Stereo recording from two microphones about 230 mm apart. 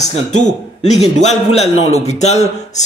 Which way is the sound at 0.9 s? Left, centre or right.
Left.